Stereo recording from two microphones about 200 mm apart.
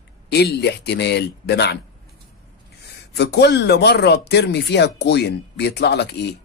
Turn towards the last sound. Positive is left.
turn(degrees=55)  # may be behind; listen again after turning